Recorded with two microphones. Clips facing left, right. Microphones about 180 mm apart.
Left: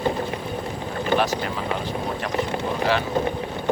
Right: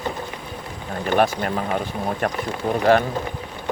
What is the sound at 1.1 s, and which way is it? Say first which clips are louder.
Speech: right 4 dB; 50° right (ahead or behind).